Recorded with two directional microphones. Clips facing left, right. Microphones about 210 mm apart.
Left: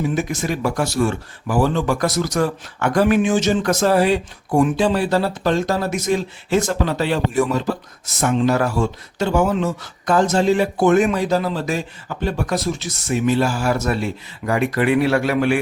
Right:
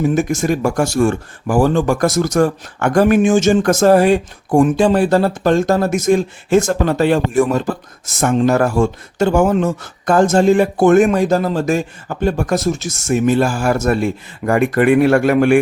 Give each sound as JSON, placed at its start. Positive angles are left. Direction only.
{"t": 0.0, "sound": "speech", "side_deg": -45}